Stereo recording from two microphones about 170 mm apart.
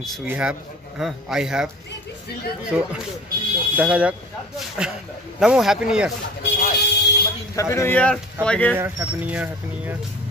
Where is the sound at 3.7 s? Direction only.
5° right (ahead or behind).